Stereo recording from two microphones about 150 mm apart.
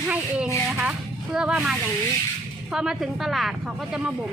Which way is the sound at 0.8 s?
5° right (ahead or behind).